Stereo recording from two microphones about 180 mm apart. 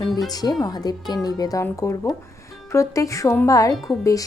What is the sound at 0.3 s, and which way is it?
Speech, 20° left (ahead or behind).